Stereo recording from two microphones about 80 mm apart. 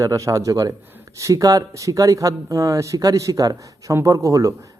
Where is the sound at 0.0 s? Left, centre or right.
Right.